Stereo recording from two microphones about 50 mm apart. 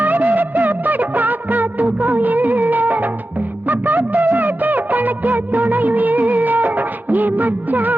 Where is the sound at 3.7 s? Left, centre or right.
Right.